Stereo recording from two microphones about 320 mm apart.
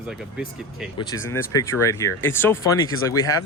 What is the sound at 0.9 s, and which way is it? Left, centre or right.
Speech, centre.